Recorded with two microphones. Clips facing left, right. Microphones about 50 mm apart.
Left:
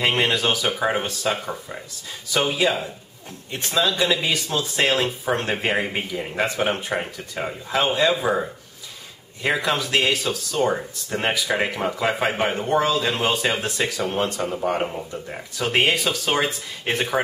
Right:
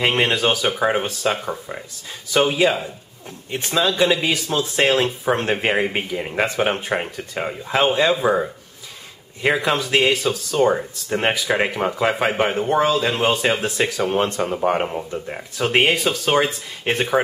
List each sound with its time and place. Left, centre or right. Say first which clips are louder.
0.2 s speech: right 2 dB; centre
9.5 s speech: right 3 dB; centre
10.1 s speech: right 4 dB; centre
14.1 s speech: right 4 dB; right; by 17.2 s centre